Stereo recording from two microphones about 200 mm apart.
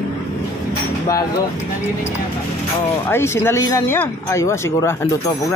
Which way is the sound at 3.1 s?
15° left (ahead or behind).